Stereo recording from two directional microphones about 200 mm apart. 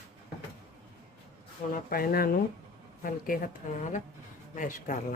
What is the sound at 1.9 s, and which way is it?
Speech, 50° left (ahead or behind).